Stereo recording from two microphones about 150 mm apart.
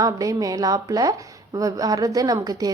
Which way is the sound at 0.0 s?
25° right (ahead or behind).